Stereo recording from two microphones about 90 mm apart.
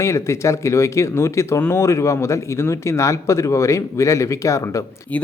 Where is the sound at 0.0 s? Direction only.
35° left (ahead or behind).